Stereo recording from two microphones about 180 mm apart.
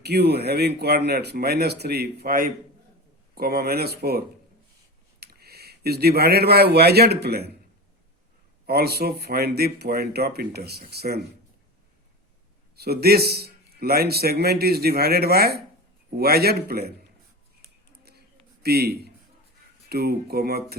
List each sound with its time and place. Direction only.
0.0 s speech: 65° right (ahead or behind)
5.2 s speech: 60° right (ahead or behind)
8.6 s speech: 60° right (ahead or behind)
12.7 s speech: 60° right (ahead or behind)
17.9 s a sound: 60° right (ahead or behind)
18.6 s a man's voice: 60° right (ahead or behind)